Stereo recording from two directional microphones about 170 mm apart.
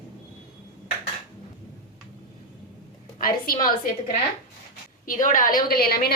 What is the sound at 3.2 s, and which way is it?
Speech, 55° left (ahead or behind).